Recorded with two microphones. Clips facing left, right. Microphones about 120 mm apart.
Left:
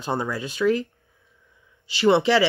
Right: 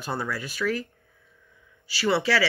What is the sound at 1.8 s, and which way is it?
Speech, 20° left (ahead or behind).